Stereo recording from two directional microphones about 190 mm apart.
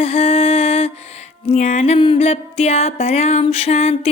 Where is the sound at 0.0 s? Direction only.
30° left (ahead or behind).